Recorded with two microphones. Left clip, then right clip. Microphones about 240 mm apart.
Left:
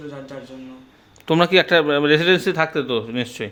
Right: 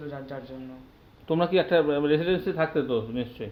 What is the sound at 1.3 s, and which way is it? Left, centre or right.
Speech, left.